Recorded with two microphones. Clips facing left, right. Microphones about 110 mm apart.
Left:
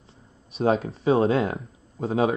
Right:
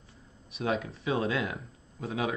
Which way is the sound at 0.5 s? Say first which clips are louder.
Left 8 dB; 30° left (ahead or behind).